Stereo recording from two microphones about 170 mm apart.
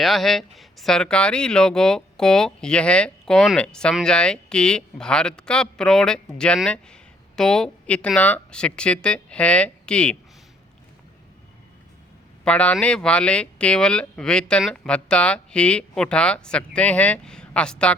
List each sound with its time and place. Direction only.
0.0 s speech: centre (ahead or behind)
12.5 s speech: 5° left (ahead or behind)